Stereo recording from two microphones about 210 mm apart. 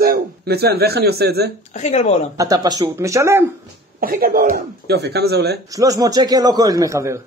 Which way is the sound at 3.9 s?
45° right (ahead or behind).